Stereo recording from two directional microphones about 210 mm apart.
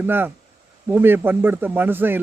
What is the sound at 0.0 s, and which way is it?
Speech, 10° right (ahead or behind).